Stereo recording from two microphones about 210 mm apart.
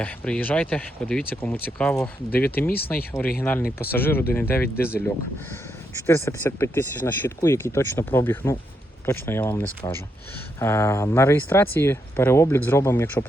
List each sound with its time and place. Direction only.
0.0 s speech: 5° left (ahead or behind)
2.6 s speech: 45° left (ahead or behind)
3.4 s speech: 10° left (ahead or behind)
6.1 s speech: 10° left (ahead or behind)